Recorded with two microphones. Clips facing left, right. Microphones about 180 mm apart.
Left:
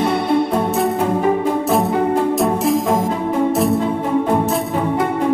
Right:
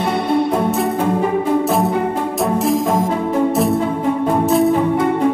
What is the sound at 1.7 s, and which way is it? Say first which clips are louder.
Music: left 1 dB; centre (ahead or behind).